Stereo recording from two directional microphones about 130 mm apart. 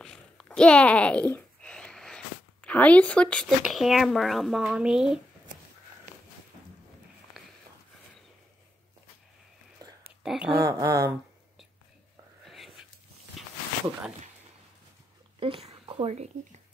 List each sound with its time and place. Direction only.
0.0 s a sound: 5° left (ahead or behind)
3.6 s speech: centre (ahead or behind)
9.8 s whispering: 30° right (ahead or behind)
10.2 s speech: 5° right (ahead or behind)
10.6 s speech: 25° right (ahead or behind)
12.4 s whispering: centre (ahead or behind)
15.3 s a sound: 45° right (ahead or behind)